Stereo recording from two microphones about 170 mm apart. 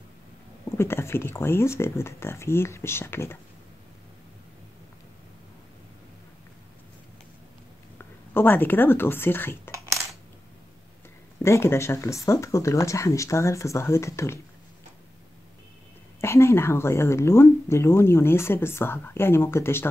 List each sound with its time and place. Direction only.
0.7 s speech: 15° left (ahead or behind)
8.0 s speech: 10° left (ahead or behind)
9.7 s coin: 20° right (ahead or behind)
11.4 s speech: 15° left (ahead or behind)
16.2 s speech: 15° left (ahead or behind)